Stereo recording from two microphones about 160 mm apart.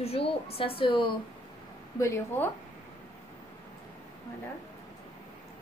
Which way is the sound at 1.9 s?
20° left (ahead or behind).